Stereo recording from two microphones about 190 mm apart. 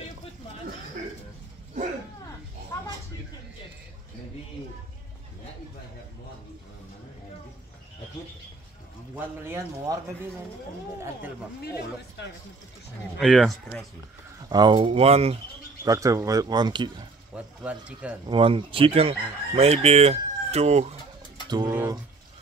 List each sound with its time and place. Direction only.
2.7 s a sound: 15° left (ahead or behind)
9.1 s speech: 10° right (ahead or behind)
11.6 s a man's voice: 55° left (ahead or behind)
13.2 s speech: centre (ahead or behind)
14.5 s speech: 20° right (ahead or behind)
15.8 s speech: 15° right (ahead or behind)
17.3 s speech: 5° right (ahead or behind)
18.2 s speech: 25° right (ahead or behind)
21.6 s speech: 10° right (ahead or behind)